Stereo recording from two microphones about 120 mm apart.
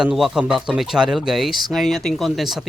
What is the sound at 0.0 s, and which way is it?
Speech, 5° right (ahead or behind).